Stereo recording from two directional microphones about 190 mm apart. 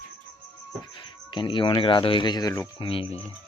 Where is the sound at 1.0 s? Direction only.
25° left (ahead or behind).